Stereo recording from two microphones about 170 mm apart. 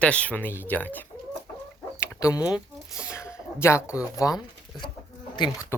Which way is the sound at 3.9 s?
20° left (ahead or behind).